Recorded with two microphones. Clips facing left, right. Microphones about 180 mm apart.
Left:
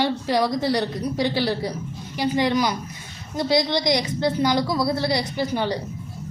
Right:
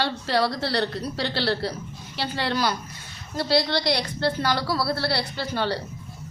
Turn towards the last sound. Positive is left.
turn(degrees=15)  # may be behind; listen again after turning